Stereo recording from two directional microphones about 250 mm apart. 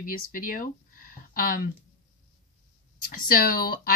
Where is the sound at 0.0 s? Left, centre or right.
Left.